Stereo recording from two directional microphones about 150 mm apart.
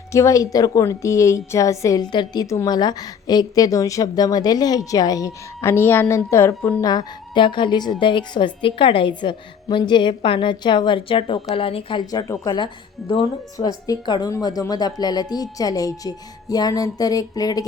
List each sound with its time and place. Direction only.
0.1 s a woman's voice: 20° left (ahead or behind)
6.8 s a woman's voice: 30° left (ahead or behind)